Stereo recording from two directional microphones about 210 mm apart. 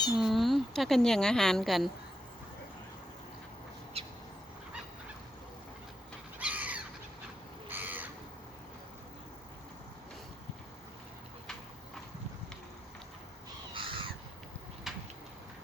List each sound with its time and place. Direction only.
0.2 s speech: centre (ahead or behind)
4.0 s bird: 30° right (ahead or behind)
6.4 s crow: 5° right (ahead or behind)
13.7 s crow: 25° right (ahead or behind)
14.9 s a sound: centre (ahead or behind)